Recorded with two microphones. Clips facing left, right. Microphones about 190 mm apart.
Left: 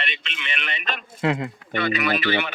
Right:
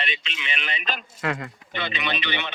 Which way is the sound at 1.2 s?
25° left (ahead or behind).